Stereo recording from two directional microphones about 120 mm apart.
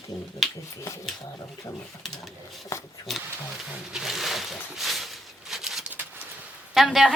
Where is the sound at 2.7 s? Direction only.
25° left (ahead or behind).